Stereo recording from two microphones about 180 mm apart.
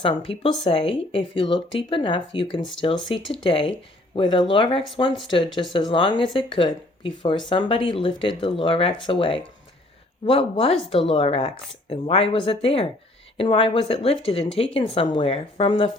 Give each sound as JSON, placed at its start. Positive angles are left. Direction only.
{"t": 0.0, "sound": "speech", "side_deg": 30}